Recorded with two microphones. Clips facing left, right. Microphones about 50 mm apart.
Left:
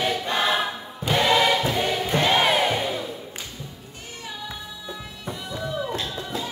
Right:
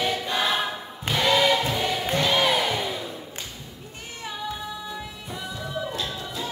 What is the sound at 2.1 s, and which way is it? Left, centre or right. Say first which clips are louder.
Crowd: left 2 dB; left.